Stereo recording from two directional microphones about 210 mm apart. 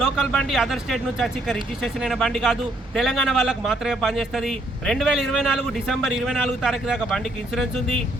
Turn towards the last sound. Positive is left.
turn(degrees=0)  # may be behind; listen again after turning